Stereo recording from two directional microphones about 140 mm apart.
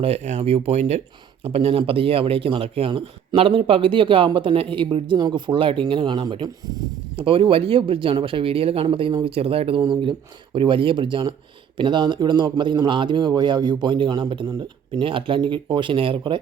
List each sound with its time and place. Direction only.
0.0 s speech: 50° right (ahead or behind)